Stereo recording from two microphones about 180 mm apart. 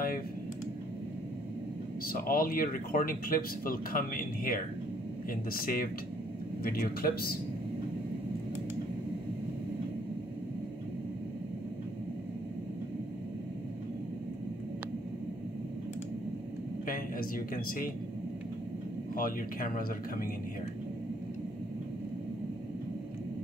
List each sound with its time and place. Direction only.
2.1 s speech: 55° left (ahead or behind)
16.8 s a sound: 50° left (ahead or behind)
19.1 s speech: 50° left (ahead or behind)